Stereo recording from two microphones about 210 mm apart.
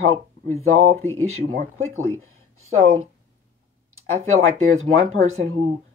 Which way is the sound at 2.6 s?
85° right.